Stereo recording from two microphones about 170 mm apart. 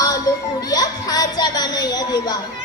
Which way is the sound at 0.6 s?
20° left (ahead or behind).